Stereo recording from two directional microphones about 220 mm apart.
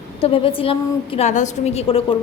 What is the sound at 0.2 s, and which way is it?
A woman's voice, 25° left (ahead or behind).